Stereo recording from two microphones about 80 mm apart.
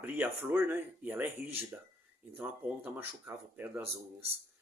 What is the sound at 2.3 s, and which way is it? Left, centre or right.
Speech, right.